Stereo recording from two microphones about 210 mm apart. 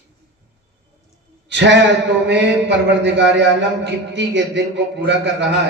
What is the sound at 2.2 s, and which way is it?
Mantra, 55° right (ahead or behind).